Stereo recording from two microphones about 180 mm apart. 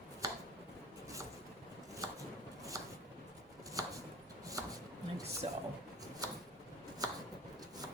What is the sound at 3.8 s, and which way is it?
Chopping, 20° right (ahead or behind).